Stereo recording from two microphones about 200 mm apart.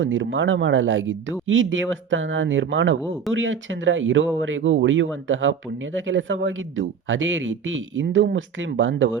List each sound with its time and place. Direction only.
0.0 s speech: 70° right (ahead or behind)